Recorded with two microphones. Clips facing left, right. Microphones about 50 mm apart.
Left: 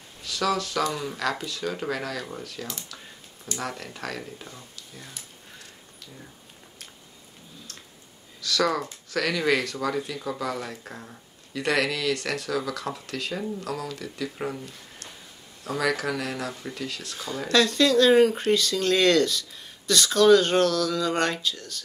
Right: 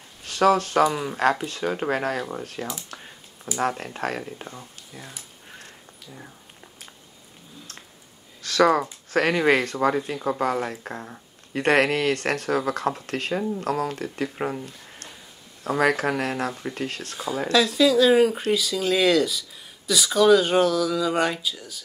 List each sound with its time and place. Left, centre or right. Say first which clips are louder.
0.2 s speech: right 7 dB; right
0.8 s speech: right 5 dB; right
1.4 s speech: right 4 dB; right
8.4 s speech: right 6 dB; right
17.5 s speech: right 1 dB; centre